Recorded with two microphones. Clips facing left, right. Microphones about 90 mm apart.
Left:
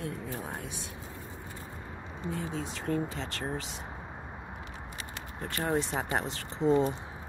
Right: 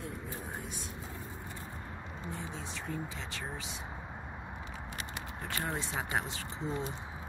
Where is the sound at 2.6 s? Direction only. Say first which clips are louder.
Left 8 dB; 60° left (ahead or behind).